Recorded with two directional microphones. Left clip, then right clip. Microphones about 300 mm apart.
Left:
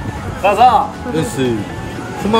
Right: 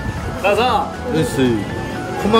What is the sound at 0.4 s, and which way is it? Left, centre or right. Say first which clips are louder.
Speech: left 6 dB; centre.